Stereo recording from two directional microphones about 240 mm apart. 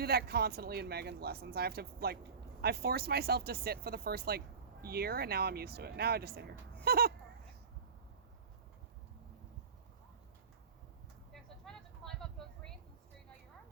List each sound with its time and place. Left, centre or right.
0.0 s speech: right
11.6 s vehicle: centre